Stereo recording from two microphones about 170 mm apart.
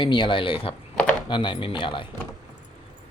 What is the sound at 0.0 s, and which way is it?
Speech, 30° left (ahead or behind).